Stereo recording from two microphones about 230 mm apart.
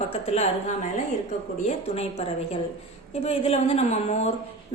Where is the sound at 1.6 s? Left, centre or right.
Left.